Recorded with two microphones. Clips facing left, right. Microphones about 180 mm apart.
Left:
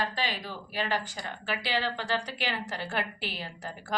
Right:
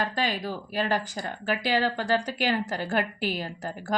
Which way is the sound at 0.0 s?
45° right (ahead or behind).